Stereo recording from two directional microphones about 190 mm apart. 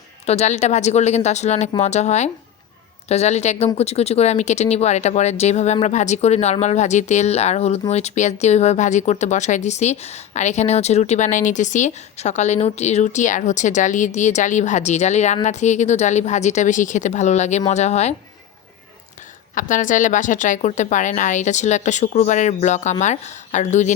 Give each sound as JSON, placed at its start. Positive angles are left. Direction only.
{"t": 0.3, "sound": "speech", "side_deg": 35}
{"t": 19.5, "sound": "speech", "side_deg": 45}